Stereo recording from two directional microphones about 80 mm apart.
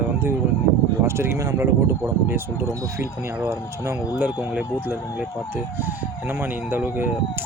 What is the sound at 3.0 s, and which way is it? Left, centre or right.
Speech, right.